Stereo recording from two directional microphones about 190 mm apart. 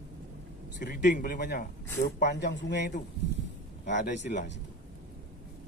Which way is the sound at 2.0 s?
60° left (ahead or behind).